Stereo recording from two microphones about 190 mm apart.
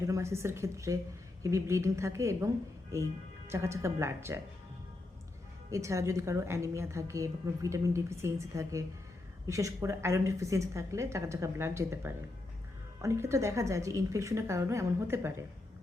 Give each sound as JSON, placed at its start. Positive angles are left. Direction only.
{"t": 0.0, "sound": "a woman's voice", "side_deg": -15}
{"t": 5.7, "sound": "a woman's voice", "side_deg": -15}